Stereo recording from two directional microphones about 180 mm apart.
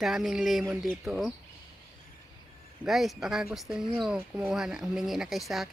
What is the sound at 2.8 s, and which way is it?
Speech, centre (ahead or behind).